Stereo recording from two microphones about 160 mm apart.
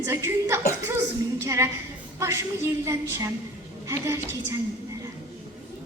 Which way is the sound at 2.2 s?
20° right (ahead or behind).